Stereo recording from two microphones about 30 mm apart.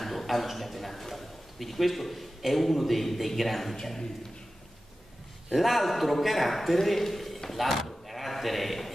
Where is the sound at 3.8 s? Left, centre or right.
Centre.